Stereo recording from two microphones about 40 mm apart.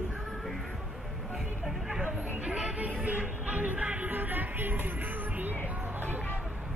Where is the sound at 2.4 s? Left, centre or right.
Right.